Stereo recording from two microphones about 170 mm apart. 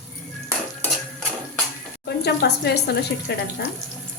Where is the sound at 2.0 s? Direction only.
75° left (ahead or behind).